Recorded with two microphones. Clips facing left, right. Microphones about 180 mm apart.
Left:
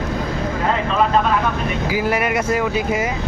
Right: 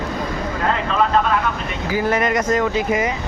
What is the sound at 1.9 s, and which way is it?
Speech, 10° left (ahead or behind).